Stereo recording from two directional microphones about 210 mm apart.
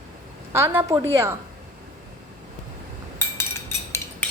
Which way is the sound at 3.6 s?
10° left (ahead or behind).